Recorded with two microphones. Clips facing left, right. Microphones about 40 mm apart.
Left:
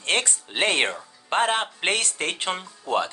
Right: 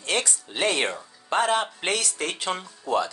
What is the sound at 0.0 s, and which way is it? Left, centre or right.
Speech, left.